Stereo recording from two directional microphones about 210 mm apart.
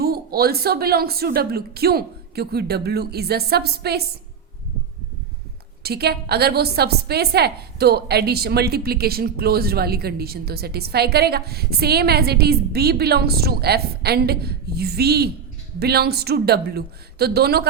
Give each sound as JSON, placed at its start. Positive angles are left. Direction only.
{"t": 0.0, "sound": "a woman's voice", "side_deg": -45}
{"t": 5.8, "sound": "a woman's voice", "side_deg": -50}